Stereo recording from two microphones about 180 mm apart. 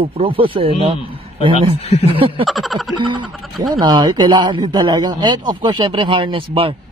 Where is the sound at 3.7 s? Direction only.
25° right (ahead or behind).